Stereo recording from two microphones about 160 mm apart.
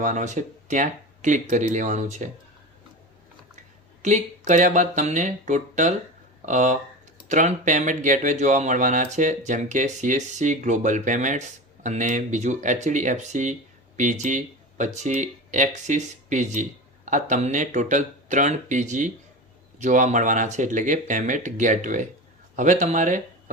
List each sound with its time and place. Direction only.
0.0 s speech: 50° right (ahead or behind)
4.0 s speech: 50° right (ahead or behind)